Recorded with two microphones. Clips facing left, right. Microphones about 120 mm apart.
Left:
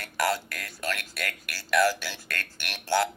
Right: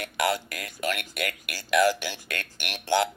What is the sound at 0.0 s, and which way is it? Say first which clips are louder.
Speech: right 1 dB; 15° right (ahead or behind).